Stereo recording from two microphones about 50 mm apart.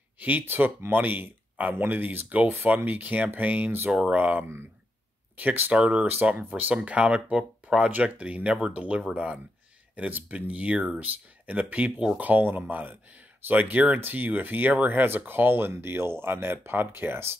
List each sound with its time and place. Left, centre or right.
0.2 s speech: right
5.8 s speech: right
6.4 s speech: right
6.7 s speech: right
8.7 s speech: right
9.9 s speech: right
15.0 s speech: right